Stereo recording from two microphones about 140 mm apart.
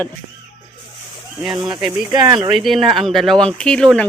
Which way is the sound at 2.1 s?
30° right (ahead or behind).